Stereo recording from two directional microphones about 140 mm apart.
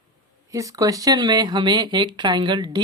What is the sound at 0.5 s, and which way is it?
Speech, 25° right (ahead or behind).